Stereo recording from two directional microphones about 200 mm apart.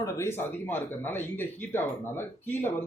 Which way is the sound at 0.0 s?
10° left (ahead or behind).